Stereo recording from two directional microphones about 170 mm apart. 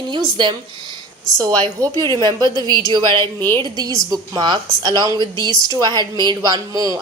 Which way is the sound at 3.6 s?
25° right (ahead or behind).